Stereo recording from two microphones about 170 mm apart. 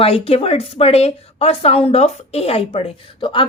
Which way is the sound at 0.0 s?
35° left (ahead or behind).